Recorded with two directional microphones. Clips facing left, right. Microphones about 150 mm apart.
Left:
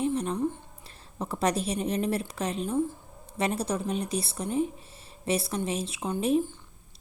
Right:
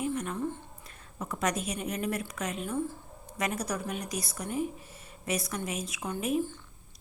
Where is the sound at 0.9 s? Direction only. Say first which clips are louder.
Left 4 dB; 30° left (ahead or behind).